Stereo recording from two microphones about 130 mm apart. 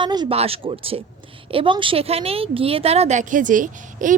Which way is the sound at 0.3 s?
50° right (ahead or behind).